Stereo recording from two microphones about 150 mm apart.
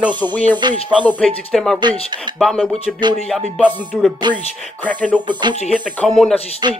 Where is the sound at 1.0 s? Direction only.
5° left (ahead or behind).